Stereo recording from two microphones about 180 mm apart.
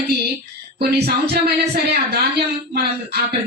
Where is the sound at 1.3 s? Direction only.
65° right (ahead or behind).